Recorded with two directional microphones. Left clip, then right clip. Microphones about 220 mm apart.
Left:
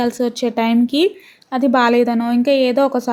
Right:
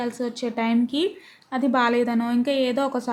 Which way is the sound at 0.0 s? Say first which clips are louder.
Left 9 dB; 20° left (ahead or behind).